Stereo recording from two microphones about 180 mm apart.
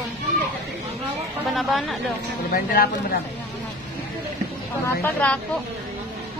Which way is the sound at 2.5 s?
55° left (ahead or behind).